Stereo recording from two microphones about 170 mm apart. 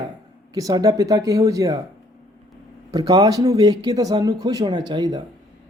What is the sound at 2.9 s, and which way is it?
Speech, 25° right (ahead or behind).